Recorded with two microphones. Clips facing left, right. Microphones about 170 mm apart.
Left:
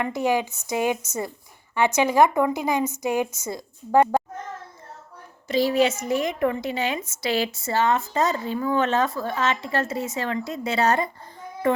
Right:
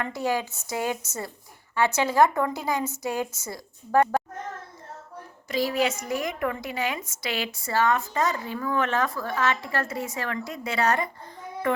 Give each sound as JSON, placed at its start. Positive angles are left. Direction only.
{"t": 0.0, "sound": "a woman's voice", "side_deg": 20}
{"t": 5.5, "sound": "a woman's voice", "side_deg": 25}